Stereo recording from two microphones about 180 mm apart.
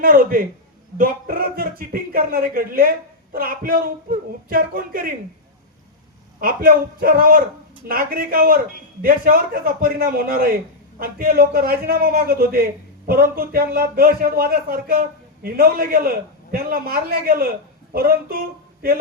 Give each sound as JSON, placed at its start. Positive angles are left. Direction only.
{"t": 0.0, "sound": "a man's voice", "side_deg": -50}
{"t": 6.4, "sound": "a man's voice", "side_deg": -55}
{"t": 17.9, "sound": "a sound", "side_deg": -55}